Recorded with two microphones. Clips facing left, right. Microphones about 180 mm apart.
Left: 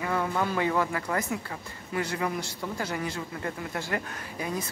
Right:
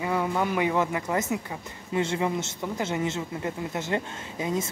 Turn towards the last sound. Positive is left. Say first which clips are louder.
# right 4 dB
turn(degrees=-20)  # may be behind; listen again after turning